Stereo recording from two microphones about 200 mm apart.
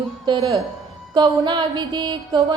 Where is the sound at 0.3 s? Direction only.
25° right (ahead or behind).